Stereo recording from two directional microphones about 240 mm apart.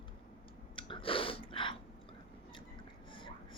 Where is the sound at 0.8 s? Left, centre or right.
Left.